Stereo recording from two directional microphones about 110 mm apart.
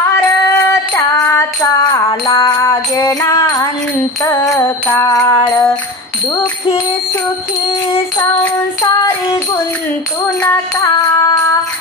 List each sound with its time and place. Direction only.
0.6 s music: 25° left (ahead or behind)
2.0 s music: 45° left (ahead or behind)
10.8 s music: 30° left (ahead or behind)